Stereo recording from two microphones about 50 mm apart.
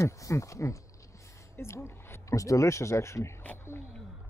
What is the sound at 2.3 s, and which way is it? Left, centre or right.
Speech, left.